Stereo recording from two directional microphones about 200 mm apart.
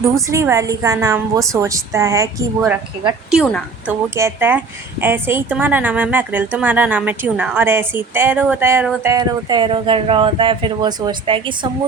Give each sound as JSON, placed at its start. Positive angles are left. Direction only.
{"t": 0.0, "sound": "a woman's voice", "side_deg": -15}
{"t": 3.3, "sound": "a woman's voice", "side_deg": 0}
{"t": 4.1, "sound": "a woman's voice", "side_deg": -10}